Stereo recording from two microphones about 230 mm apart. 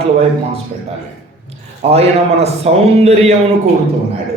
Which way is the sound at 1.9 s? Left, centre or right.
Right.